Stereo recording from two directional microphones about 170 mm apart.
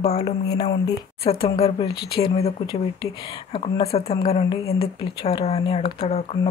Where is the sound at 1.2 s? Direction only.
35° left (ahead or behind).